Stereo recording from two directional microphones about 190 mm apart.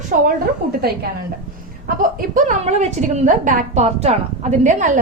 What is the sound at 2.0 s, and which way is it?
A woman's voice, 45° right (ahead or behind).